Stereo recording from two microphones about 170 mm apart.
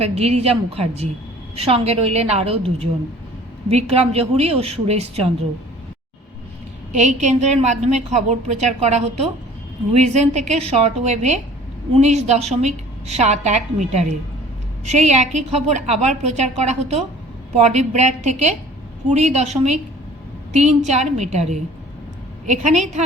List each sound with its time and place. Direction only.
0.2 s a woman's voice: 35° right (ahead or behind)
6.9 s a woman's voice: 45° right (ahead or behind)